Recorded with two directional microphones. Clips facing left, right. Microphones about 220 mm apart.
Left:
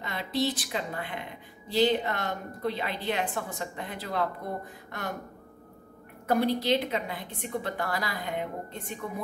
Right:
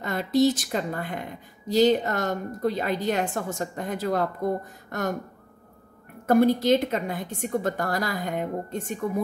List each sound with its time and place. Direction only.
0.0 s a woman's voice: 45° right (ahead or behind)
6.2 s a woman's voice: 45° right (ahead or behind)